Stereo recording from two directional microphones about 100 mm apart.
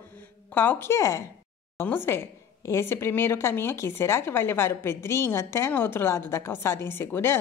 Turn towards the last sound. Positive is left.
turn(degrees=25)  # may be behind; listen again after turning